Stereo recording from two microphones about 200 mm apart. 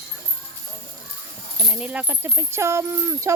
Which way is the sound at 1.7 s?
5° right (ahead or behind).